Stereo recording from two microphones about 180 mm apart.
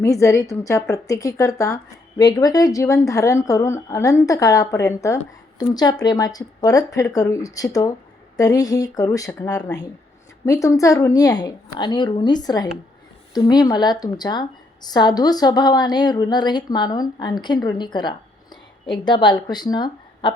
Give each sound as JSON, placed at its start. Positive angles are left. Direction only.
{"t": 0.0, "sound": "a woman's voice", "side_deg": 15}